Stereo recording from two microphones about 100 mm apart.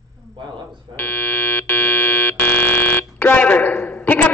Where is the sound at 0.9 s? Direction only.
20° left (ahead or behind).